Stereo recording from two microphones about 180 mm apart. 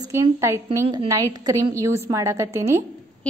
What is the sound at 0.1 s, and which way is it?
A woman's voice, 15° right (ahead or behind).